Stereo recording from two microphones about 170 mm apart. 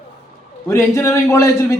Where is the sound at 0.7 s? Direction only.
15° left (ahead or behind).